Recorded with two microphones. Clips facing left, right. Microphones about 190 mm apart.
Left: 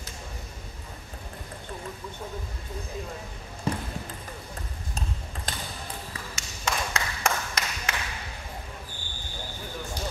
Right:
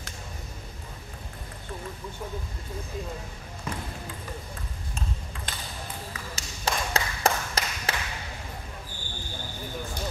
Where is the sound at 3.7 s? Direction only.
30° left (ahead or behind).